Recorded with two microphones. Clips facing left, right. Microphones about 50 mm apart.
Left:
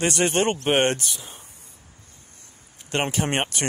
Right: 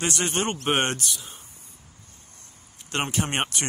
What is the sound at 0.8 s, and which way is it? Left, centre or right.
Speech, left.